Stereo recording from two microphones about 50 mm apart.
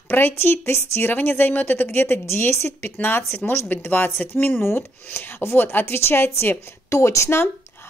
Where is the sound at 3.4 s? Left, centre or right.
Left.